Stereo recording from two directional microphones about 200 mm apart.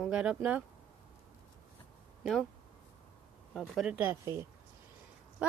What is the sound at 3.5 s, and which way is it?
Speech, centre (ahead or behind).